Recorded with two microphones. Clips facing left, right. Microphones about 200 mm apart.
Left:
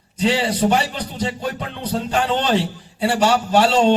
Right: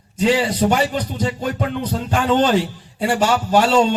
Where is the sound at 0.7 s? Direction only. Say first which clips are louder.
Right 2 dB; 45° right (ahead or behind).